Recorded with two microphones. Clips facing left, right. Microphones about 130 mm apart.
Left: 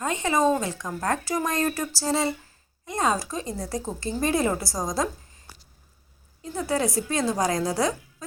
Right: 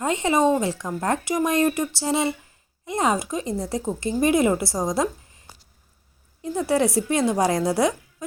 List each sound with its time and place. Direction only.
0.0 s a woman's voice: 25° right (ahead or behind)
6.4 s a woman's voice: 20° right (ahead or behind)